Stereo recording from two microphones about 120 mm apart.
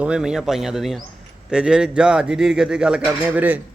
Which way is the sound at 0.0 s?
5° right (ahead or behind).